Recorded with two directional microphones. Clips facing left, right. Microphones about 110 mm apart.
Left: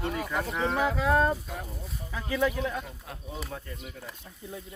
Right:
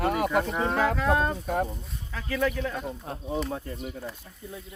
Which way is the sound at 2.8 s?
35° right (ahead or behind).